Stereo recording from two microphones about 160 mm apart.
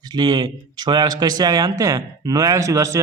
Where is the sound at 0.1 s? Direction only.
25° right (ahead or behind).